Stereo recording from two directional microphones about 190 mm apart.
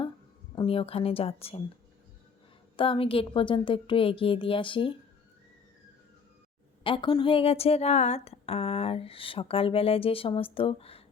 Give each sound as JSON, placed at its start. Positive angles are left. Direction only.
{"t": 0.5, "sound": "speech", "side_deg": 30}
{"t": 2.7, "sound": "speech", "side_deg": 30}
{"t": 6.8, "sound": "speech", "side_deg": 25}